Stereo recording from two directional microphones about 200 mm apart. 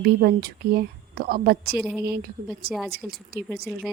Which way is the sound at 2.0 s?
50° right (ahead or behind).